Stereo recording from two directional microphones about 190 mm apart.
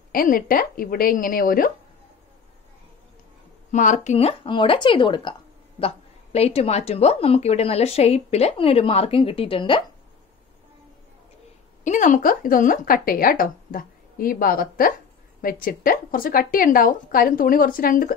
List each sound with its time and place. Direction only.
0.1 s speech: 50° left (ahead or behind)
3.7 s speech: 40° left (ahead or behind)
11.8 s speech: 40° left (ahead or behind)